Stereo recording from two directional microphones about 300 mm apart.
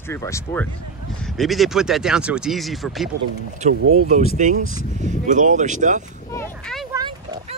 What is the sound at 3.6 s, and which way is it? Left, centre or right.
Speech, right.